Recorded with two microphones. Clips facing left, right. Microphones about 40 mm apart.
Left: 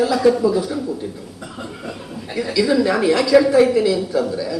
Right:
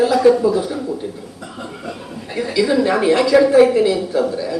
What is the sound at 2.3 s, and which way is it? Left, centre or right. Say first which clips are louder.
A woman's voice: right 1 dB; centre.